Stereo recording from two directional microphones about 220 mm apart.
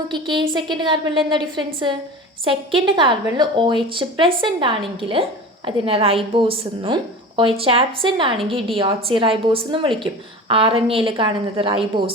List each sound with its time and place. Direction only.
0.1 s a woman's voice: 20° right (ahead or behind)